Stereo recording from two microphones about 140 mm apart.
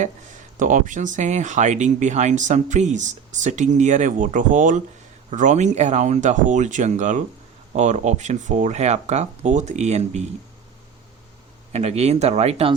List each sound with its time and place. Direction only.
0.5 s speech: 65° right (ahead or behind)
11.7 s speech: 50° right (ahead or behind)